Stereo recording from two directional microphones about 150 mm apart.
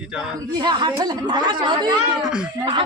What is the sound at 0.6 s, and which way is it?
A woman's voice, 30° right (ahead or behind).